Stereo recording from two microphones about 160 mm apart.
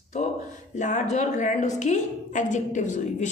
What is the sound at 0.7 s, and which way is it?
A woman's voice, 50° left (ahead or behind).